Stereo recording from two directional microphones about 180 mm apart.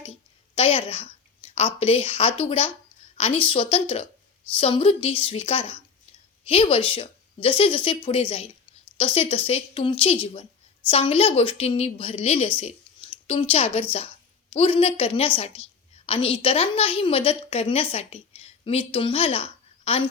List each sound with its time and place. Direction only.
0.5 s a woman's voice: 30° left (ahead or behind)